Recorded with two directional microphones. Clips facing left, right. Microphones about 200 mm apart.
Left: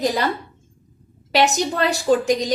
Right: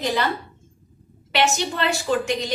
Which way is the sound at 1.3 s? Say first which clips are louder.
Left 3 dB; 40° left (ahead or behind).